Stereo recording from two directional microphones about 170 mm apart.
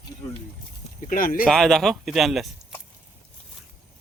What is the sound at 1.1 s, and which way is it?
Speech, 55° left (ahead or behind).